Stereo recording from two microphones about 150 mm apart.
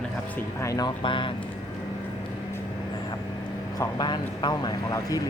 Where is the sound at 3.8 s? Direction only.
30° left (ahead or behind).